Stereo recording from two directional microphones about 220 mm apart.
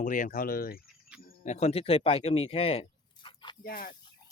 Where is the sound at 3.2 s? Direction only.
20° left (ahead or behind).